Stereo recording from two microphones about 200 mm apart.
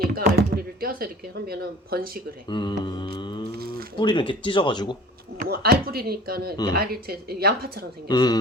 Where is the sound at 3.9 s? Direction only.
25° left (ahead or behind).